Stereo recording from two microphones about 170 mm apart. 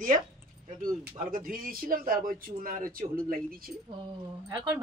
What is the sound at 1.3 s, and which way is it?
A man's voice, 55° right (ahead or behind).